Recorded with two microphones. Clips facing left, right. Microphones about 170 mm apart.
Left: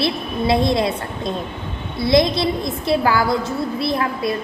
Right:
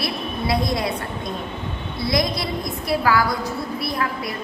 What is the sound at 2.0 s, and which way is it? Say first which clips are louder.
A woman's voice: left 7 dB; 25° left (ahead or behind).